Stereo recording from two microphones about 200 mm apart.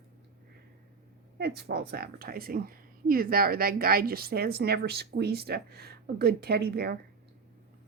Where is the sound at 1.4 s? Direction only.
50° right (ahead or behind).